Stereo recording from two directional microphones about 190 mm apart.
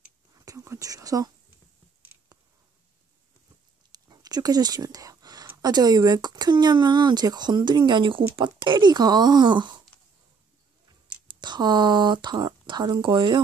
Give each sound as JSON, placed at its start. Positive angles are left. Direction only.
{"t": 0.3, "sound": "whispering", "side_deg": -20}
{"t": 4.1, "sound": "a woman's voice", "side_deg": -20}
{"t": 11.2, "sound": "speech", "side_deg": -25}